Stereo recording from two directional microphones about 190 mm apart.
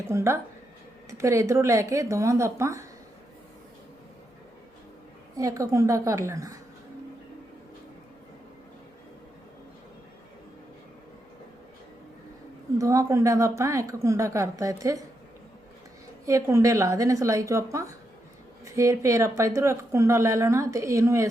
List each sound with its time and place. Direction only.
0.1 s speech: 15° right (ahead or behind)
5.4 s speech: 15° right (ahead or behind)
12.8 s speech: 15° right (ahead or behind)
16.2 s speech: 15° right (ahead or behind)